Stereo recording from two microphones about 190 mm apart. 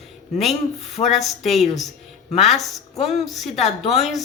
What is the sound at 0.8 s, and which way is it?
Speech, 35° left (ahead or behind).